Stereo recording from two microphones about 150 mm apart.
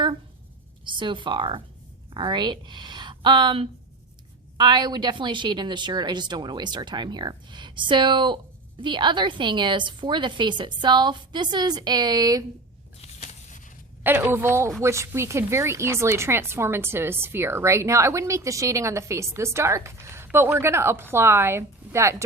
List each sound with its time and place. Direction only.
0.9 s a woman's voice: 35° right (ahead or behind)
13.0 s a sound: 50° left (ahead or behind)
14.0 s speech: 15° right (ahead or behind)